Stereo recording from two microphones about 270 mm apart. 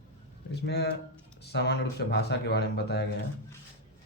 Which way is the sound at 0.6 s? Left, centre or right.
Left.